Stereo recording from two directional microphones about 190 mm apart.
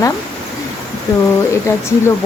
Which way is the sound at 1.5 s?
15° left (ahead or behind).